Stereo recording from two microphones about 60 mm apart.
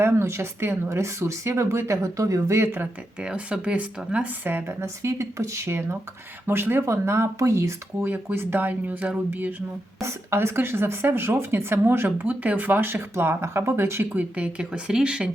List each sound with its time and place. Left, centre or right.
0.0 s speech: right
2.8 s speech: centre
4.4 s speech: right
4.8 s speech: right
8.0 s speech: right
10.0 s speech: right
12.2 s speech: right
14.2 s speech: centre